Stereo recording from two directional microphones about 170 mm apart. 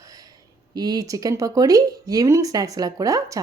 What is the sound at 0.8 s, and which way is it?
Speech, 20° right (ahead or behind).